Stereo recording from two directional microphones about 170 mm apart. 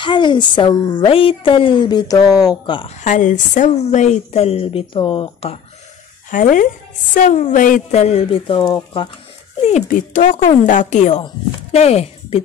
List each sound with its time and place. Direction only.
0.0 s speech: 30° left (ahead or behind)
3.0 s a woman's voice: 45° left (ahead or behind)
6.3 s a woman's voice: 50° left (ahead or behind); by 9.1 s 25° left (ahead or behind)
9.7 s speech: 45° left (ahead or behind)